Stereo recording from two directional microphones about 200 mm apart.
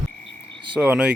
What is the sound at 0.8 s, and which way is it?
Speech, 5° right (ahead or behind).